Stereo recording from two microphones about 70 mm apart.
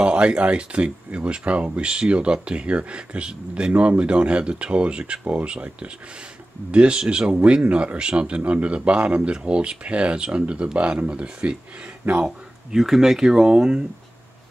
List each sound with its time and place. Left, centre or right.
0.0 s speech: centre